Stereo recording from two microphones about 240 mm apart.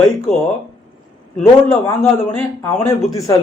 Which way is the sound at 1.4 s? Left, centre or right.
Centre.